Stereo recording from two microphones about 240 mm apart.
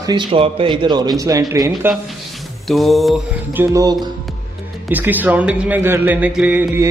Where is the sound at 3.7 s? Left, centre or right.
Centre.